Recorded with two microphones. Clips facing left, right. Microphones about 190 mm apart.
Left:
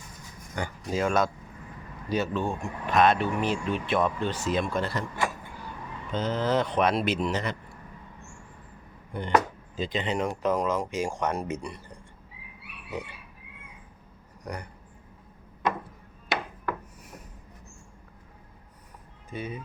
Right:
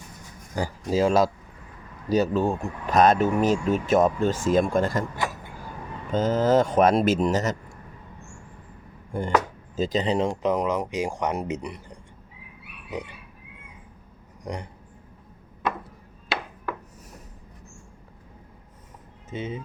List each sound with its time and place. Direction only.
0.5 s speech: 35° right (ahead or behind)
6.1 s speech: 45° right (ahead or behind)
9.1 s speech: 45° right (ahead or behind)
10.4 s speech: 15° right (ahead or behind)
14.4 s speech: 25° right (ahead or behind)
19.3 s speech: 25° right (ahead or behind)